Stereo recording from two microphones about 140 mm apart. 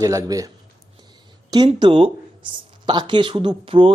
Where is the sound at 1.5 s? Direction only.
30° right (ahead or behind).